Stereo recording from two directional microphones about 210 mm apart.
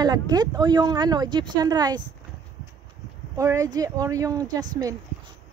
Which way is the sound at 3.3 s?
15° right (ahead or behind).